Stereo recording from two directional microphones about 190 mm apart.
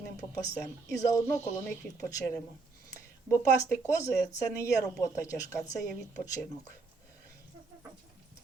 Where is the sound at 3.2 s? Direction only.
15° left (ahead or behind).